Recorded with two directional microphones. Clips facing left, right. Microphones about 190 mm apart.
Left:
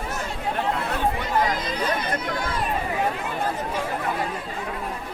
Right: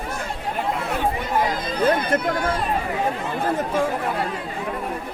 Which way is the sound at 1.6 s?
55° right (ahead or behind).